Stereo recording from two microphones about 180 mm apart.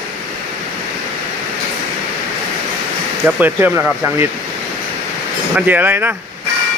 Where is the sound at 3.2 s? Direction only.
10° right (ahead or behind).